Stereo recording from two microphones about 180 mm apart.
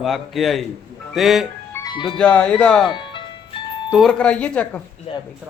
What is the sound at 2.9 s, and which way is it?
Music, 25° left (ahead or behind).